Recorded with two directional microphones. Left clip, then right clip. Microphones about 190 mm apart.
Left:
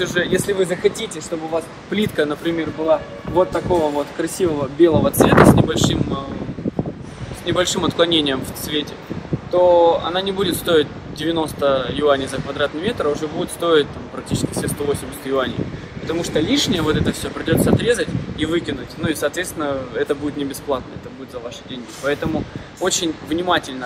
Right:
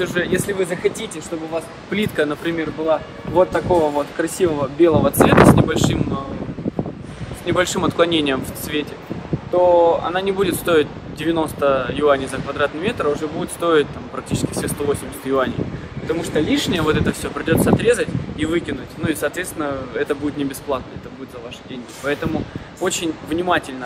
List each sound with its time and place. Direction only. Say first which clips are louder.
0.0 s speech: left 1 dB; centre (ahead or behind); by 5.1 s 15° right (ahead or behind)
5.3 s speech: even; 15° left (ahead or behind)
5.7 s speech: even; 15° right (ahead or behind)
7.4 s speech: even; 15° right (ahead or behind)
16.7 s speech: right 1 dB; 15° right (ahead or behind)
22.0 s speech: left 1 dB; centre (ahead or behind)